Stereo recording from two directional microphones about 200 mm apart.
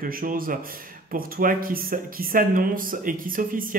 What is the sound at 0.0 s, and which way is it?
Speech, 45° right (ahead or behind).